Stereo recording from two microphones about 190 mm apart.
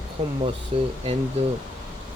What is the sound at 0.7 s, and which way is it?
Speech, 30° right (ahead or behind).